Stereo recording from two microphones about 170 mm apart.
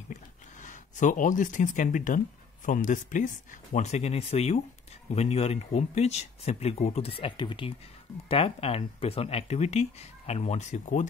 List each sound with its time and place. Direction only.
0.1 s speech: 45° left (ahead or behind)